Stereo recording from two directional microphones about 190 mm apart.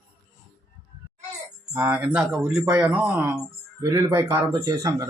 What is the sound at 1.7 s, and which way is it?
Speech, 10° right (ahead or behind).